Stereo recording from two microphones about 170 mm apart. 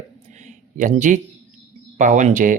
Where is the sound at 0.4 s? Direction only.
45° right (ahead or behind).